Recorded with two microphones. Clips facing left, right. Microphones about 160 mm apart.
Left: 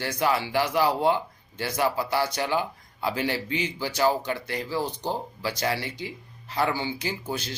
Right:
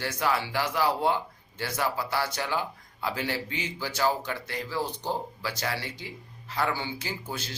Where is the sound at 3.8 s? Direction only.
15° left (ahead or behind).